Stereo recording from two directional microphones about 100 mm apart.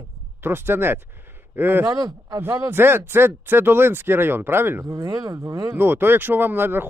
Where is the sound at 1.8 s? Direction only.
40° right (ahead or behind).